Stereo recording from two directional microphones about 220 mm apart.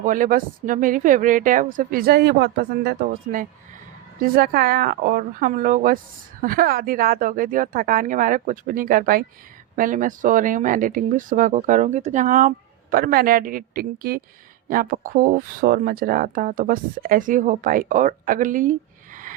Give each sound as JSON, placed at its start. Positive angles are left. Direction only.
{"t": 0.0, "sound": "speech", "side_deg": -35}
{"t": 3.3, "sound": "speech", "side_deg": -35}